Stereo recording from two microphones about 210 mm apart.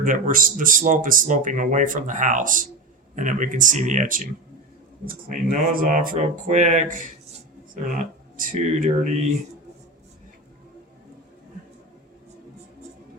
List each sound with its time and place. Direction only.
0.0 s speech: 40° right (ahead or behind)